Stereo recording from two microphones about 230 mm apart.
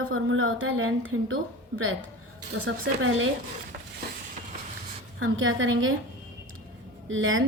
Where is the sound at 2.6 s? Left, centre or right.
Right.